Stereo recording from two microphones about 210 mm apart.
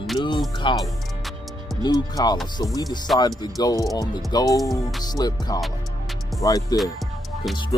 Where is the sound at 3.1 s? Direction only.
Centre (ahead or behind).